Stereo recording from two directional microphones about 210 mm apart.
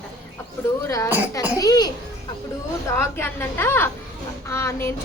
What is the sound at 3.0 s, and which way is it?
A woman's voice, 10° left (ahead or behind).